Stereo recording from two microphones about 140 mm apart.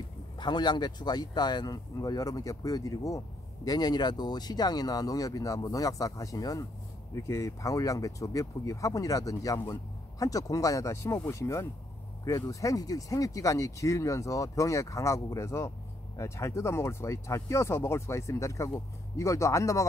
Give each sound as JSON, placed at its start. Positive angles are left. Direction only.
{"t": 0.4, "sound": "speech", "side_deg": 30}